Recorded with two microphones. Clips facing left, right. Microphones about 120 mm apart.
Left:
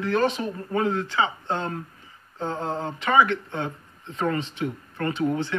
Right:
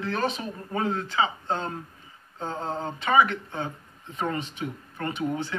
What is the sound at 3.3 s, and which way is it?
Speech, 30° left (ahead or behind).